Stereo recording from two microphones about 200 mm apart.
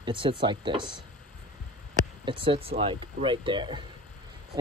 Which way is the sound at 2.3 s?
25° right (ahead or behind).